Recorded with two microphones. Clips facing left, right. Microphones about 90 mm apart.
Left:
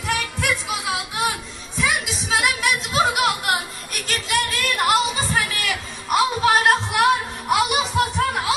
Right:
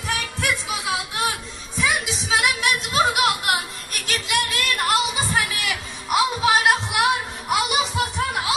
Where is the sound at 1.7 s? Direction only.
Centre (ahead or behind).